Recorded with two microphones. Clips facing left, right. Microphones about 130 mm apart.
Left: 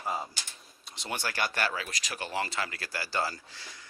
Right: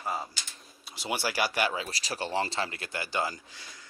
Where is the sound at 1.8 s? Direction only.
35° right (ahead or behind).